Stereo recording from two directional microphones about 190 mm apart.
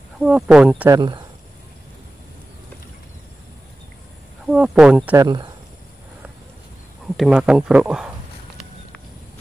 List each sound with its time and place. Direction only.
0.2 s speech: 5° right (ahead or behind)
0.9 s speech: 25° right (ahead or behind)
4.5 s speech: 5° right (ahead or behind)
5.1 s speech: 20° right (ahead or behind)
7.2 s speech: 5° right (ahead or behind)